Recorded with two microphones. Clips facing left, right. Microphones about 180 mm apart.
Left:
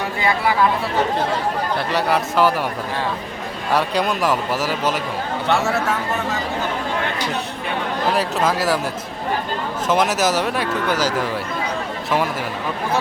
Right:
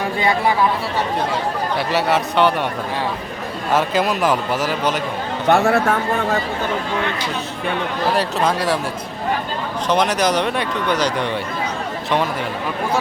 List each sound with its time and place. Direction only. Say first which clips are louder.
1.9 s speech: right 2 dB; centre (ahead or behind)
3.7 s speech: right 2 dB; centre (ahead or behind)
5.5 s a man's voice: right 5 dB; 55° right (ahead or behind)
8.1 s speech: right 1 dB; centre (ahead or behind)
9.9 s speech: right 1 dB; 5° left (ahead or behind)